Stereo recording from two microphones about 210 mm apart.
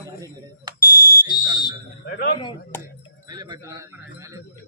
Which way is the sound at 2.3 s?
20° left (ahead or behind).